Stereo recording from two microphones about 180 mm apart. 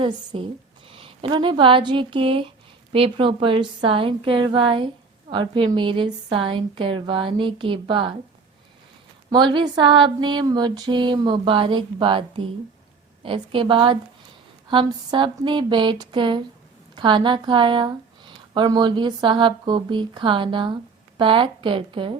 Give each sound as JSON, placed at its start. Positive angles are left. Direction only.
{"t": 0.3, "sound": "speech", "side_deg": -30}
{"t": 9.3, "sound": "speech", "side_deg": -25}